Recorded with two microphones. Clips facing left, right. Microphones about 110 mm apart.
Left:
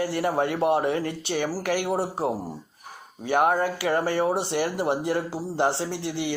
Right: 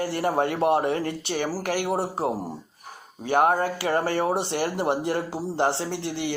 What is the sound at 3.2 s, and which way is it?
Speech, 45° right (ahead or behind).